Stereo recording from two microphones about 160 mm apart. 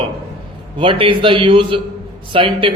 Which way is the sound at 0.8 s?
30° right (ahead or behind).